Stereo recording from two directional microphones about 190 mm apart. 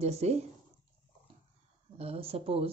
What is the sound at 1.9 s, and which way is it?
Speech, 30° right (ahead or behind).